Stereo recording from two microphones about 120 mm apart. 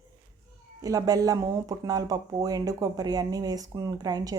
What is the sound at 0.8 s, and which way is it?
Speech, 30° right (ahead or behind).